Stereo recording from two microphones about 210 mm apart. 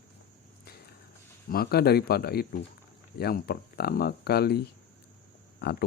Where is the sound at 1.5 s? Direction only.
45° left (ahead or behind).